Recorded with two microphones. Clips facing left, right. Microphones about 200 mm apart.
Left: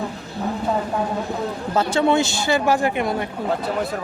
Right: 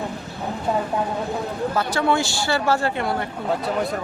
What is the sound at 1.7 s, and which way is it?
Speech, 25° left (ahead or behind).